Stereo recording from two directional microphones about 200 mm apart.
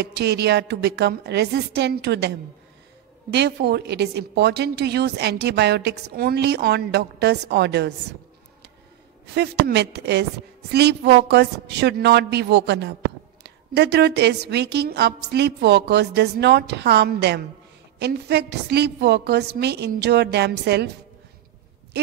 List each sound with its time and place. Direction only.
0.0 s a woman's voice: 55° right (ahead or behind)
9.2 s a woman's voice: 55° right (ahead or behind)